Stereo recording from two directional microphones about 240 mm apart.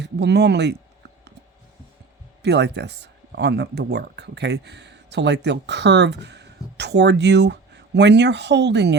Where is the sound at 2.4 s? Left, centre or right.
Right.